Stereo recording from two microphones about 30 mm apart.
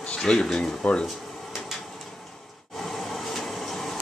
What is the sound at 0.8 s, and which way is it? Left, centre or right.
Speech, left.